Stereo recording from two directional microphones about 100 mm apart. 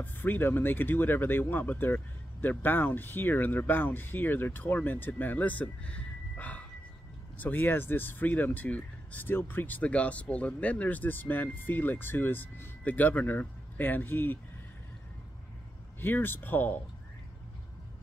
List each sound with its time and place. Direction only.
0.0 s speech: 20° left (ahead or behind)
16.0 s speech: 20° left (ahead or behind)